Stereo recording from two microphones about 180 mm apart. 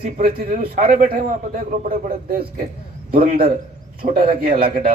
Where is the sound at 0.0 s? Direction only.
55° right (ahead or behind).